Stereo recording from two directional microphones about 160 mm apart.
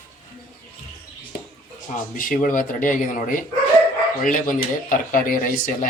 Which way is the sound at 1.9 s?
55° left (ahead or behind).